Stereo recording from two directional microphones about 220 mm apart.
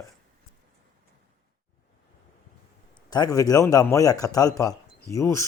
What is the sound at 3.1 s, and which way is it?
A man's voice, 15° left (ahead or behind).